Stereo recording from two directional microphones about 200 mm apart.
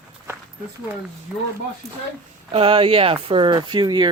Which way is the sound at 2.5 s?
25° right (ahead or behind).